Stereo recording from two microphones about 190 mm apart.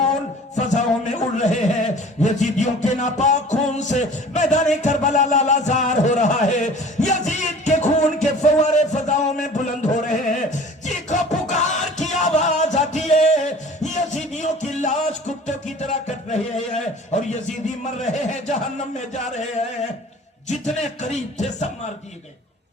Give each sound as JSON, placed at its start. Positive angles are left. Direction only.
{"t": 0.5, "sound": "a man's voice", "side_deg": 40}
{"t": 4.8, "sound": "a sound", "side_deg": 40}
{"t": 12.2, "sound": "music", "side_deg": 40}
{"t": 16.0, "sound": "music", "side_deg": 40}
{"t": 18.0, "sound": "a sound", "side_deg": 40}
{"t": 20.5, "sound": "music", "side_deg": 35}